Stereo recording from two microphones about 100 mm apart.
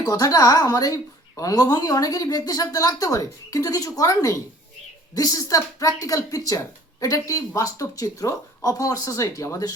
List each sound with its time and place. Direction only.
0.0 s a woman's voice: 35° left (ahead or behind)